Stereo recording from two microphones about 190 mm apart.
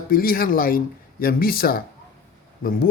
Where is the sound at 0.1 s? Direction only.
50° left (ahead or behind).